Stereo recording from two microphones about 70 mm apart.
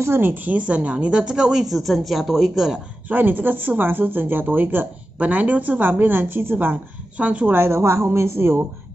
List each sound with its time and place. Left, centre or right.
0.0 s a woman's voice: right; by 2.8 s centre
3.1 s speech: right
7.5 s a woman's voice: right